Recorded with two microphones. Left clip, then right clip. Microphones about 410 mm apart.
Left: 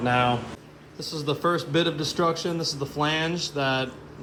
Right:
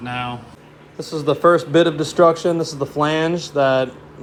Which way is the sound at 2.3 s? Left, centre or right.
Centre.